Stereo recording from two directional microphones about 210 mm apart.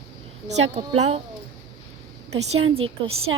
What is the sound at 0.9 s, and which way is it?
Speech, 30° right (ahead or behind).